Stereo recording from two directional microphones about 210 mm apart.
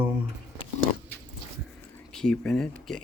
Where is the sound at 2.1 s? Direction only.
5° left (ahead or behind).